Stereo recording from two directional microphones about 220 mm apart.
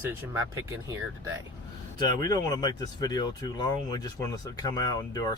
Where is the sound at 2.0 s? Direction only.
15° left (ahead or behind).